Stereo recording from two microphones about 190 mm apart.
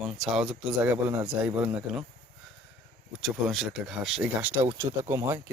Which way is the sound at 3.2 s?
Centre (ahead or behind).